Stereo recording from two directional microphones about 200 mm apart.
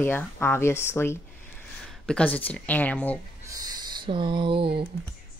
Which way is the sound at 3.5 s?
20° right (ahead or behind).